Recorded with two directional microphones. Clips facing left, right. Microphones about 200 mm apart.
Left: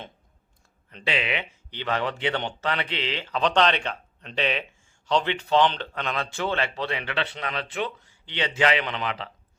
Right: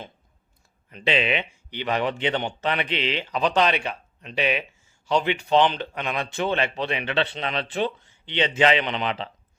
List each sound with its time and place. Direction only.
1.0 s speech: 25° right (ahead or behind)